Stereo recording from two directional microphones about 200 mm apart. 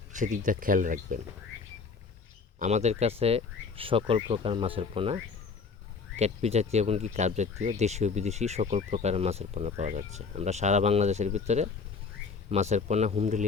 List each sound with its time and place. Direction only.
0.1 s speech: 40° right (ahead or behind)
2.6 s speech: 35° right (ahead or behind)